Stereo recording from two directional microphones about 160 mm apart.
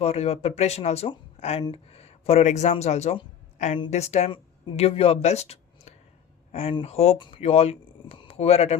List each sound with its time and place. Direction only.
0.0 s speech: 40° left (ahead or behind)